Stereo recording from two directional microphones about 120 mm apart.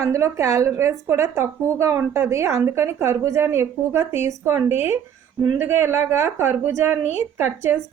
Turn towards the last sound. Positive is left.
turn(degrees=-20)  # may be behind; listen again after turning